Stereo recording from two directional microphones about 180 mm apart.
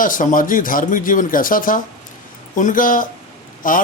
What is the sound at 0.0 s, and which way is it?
Speech, 45° left (ahead or behind).